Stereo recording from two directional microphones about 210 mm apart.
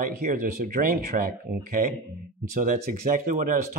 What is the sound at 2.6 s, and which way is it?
Speech, 40° right (ahead or behind).